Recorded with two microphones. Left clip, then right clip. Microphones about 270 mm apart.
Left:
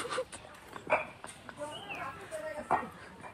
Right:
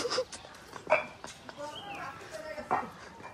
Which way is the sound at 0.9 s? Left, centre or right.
Right.